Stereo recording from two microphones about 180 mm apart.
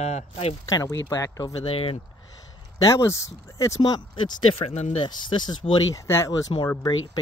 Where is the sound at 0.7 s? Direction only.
20° left (ahead or behind).